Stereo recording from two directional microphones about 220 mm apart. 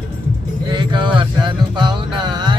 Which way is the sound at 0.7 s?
20° right (ahead or behind).